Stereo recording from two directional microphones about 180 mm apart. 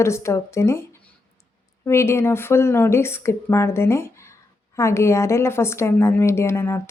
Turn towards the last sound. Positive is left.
turn(degrees=15)  # may be behind; listen again after turning